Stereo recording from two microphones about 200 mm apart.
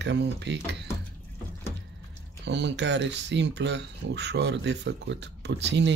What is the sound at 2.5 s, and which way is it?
Speech, 60° right (ahead or behind).